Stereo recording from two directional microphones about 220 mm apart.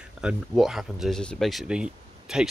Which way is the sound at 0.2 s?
5° right (ahead or behind).